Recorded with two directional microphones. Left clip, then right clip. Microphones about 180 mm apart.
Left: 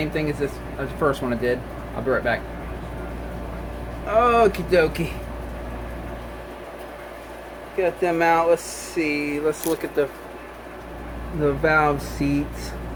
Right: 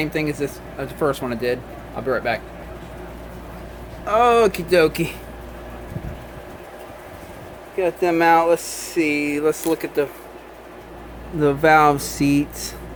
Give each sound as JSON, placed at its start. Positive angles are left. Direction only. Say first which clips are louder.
{"t": 0.0, "sound": "speech", "louder": "right 2 dB", "side_deg": -50}
{"t": 4.0, "sound": "speech", "louder": "right 2 dB", "side_deg": -50}
{"t": 7.8, "sound": "speech", "louder": "right 2 dB", "side_deg": -45}
{"t": 10.0, "sound": "speech", "louder": "left 1 dB", "side_deg": -35}
{"t": 11.4, "sound": "speech", "louder": "right 5 dB", "side_deg": -50}